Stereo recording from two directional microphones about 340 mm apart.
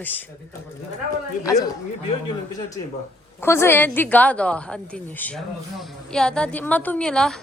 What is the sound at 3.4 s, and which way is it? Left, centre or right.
A woman's voice, centre.